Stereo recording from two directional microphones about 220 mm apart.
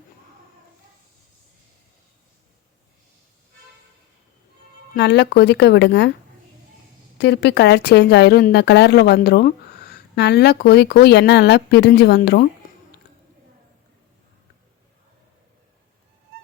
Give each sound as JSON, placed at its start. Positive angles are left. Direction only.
{"t": 4.9, "sound": "speech", "side_deg": 50}
{"t": 7.2, "sound": "speech", "side_deg": 50}